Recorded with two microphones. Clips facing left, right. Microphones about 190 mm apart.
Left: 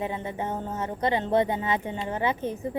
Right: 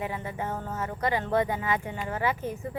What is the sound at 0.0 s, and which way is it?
Speech, 20° left (ahead or behind).